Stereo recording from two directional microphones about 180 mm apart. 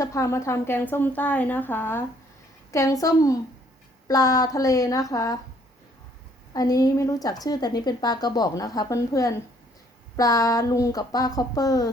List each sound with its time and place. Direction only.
0.0 s a woman's voice: 15° left (ahead or behind)
6.5 s a woman's voice: 20° left (ahead or behind)